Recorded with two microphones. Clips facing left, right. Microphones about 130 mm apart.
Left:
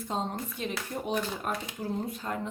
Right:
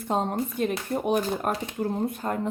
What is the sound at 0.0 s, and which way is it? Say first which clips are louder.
Speech: right 7 dB; 60° right (ahead or behind).